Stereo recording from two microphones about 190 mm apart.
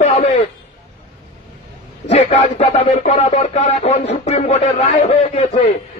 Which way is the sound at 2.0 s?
35° left (ahead or behind).